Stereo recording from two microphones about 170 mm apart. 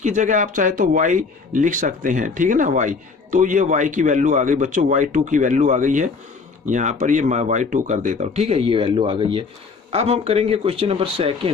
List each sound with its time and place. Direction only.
0.0 s speech: 45° right (ahead or behind)